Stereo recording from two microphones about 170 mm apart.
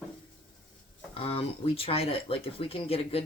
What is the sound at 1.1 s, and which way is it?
Speech, 35° left (ahead or behind).